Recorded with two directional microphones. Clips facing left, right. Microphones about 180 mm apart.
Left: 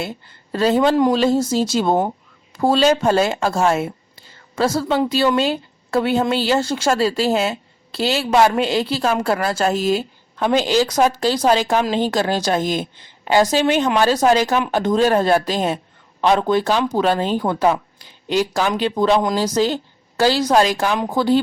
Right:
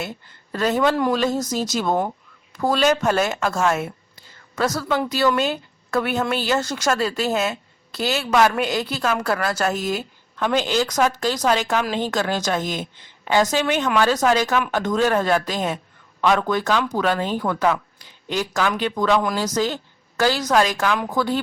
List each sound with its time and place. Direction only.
0.0 s a woman's voice: 30° left (ahead or behind)